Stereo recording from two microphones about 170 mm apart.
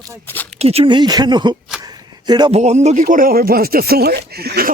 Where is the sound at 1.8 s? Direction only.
25° right (ahead or behind).